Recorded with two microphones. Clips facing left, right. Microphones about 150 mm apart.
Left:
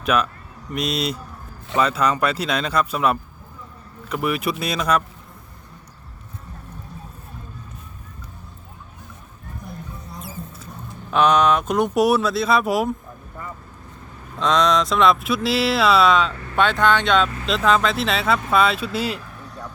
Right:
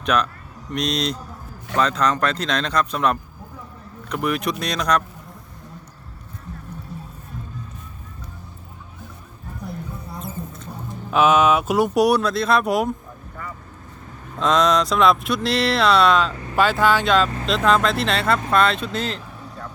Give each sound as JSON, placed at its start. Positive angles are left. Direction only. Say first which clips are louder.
{"t": 0.0, "sound": "speech", "louder": "even", "side_deg": 5}
{"t": 11.1, "sound": "speech", "louder": "right 1 dB", "side_deg": -5}
{"t": 14.3, "sound": "speech", "louder": "right 1 dB", "side_deg": 0}